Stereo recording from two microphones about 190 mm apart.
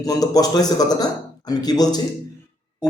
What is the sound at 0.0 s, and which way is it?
A man's voice, 20° left (ahead or behind).